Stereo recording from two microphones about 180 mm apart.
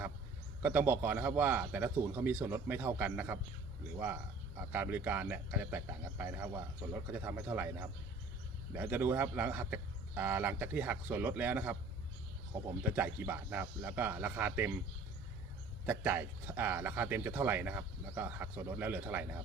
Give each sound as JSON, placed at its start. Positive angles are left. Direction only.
{"t": 0.6, "sound": "speech", "side_deg": -10}
{"t": 4.7, "sound": "speech", "side_deg": -10}
{"t": 12.8, "sound": "speech", "side_deg": -10}
{"t": 15.9, "sound": "speech", "side_deg": -10}